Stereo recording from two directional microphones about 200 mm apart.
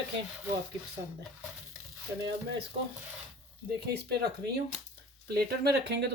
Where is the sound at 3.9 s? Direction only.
55° right (ahead or behind).